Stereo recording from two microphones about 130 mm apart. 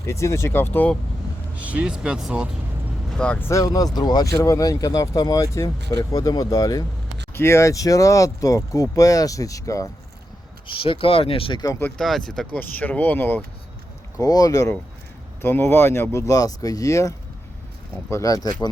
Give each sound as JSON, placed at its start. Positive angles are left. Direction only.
{"t": 0.1, "sound": "speech", "side_deg": 20}
{"t": 1.5, "sound": "speech", "side_deg": -10}
{"t": 3.1, "sound": "speech", "side_deg": 5}
{"t": 3.6, "sound": "speech", "side_deg": 30}
{"t": 10.7, "sound": "speech", "side_deg": 45}
{"t": 11.8, "sound": "speech", "side_deg": 5}
{"t": 14.2, "sound": "speech", "side_deg": 25}